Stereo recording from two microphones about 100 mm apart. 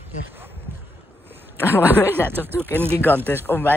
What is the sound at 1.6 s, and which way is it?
Speech, 20° left (ahead or behind).